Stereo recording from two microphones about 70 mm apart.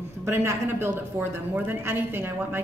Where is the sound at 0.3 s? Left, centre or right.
Right.